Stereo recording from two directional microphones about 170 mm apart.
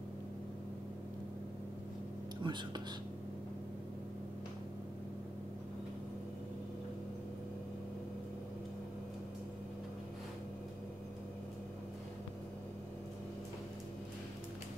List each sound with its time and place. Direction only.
2.4 s speech: 25° right (ahead or behind)